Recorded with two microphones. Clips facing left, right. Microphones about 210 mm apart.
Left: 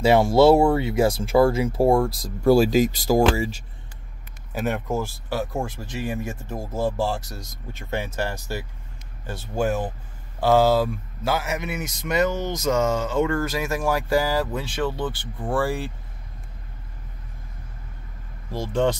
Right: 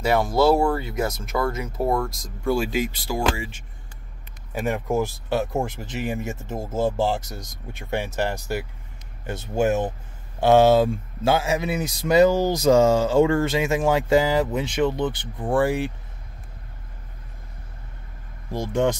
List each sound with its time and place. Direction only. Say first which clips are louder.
0.0 s speech: left 4 dB; 25° left (ahead or behind)
4.5 s speech: even; centre (ahead or behind)
4.8 s a man's voice: right 3 dB; 20° right (ahead or behind)
18.5 s speech: even; 15° right (ahead or behind)